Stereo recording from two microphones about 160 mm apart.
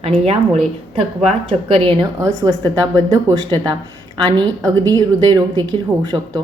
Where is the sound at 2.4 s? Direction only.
20° right (ahead or behind).